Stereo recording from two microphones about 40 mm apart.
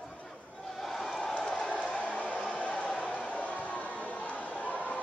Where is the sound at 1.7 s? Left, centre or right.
Left.